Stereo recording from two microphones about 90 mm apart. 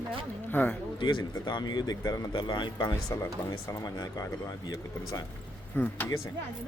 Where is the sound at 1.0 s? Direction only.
60° left (ahead or behind).